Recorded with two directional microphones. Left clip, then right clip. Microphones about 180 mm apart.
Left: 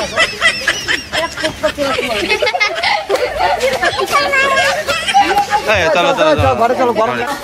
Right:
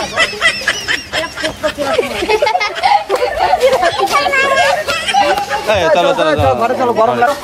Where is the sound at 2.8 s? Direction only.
55° right (ahead or behind).